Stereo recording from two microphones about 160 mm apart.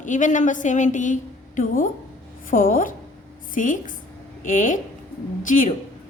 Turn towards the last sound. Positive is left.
turn(degrees=55)  # may be behind; listen again after turning